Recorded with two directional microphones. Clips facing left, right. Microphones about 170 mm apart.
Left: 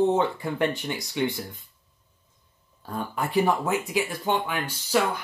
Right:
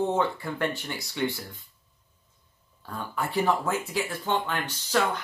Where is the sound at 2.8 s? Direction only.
20° left (ahead or behind).